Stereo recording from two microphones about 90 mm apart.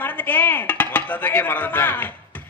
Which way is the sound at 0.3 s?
20° left (ahead or behind).